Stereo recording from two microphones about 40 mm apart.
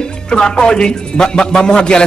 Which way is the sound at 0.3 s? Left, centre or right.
Left.